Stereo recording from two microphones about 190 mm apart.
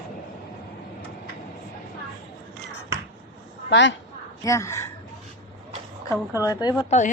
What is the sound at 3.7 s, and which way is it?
Speech, 70° left (ahead or behind).